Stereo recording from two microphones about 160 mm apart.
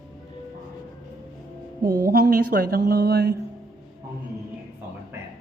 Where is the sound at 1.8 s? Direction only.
65° right (ahead or behind); by 3.4 s 80° right.